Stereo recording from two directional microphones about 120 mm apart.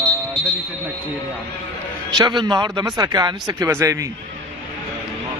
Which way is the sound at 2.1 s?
40° right (ahead or behind).